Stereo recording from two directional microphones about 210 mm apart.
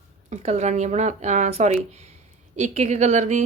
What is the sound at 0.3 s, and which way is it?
Speech, 30° right (ahead or behind).